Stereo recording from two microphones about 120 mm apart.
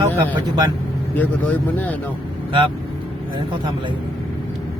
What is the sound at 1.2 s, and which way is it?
Speech, 15° left (ahead or behind).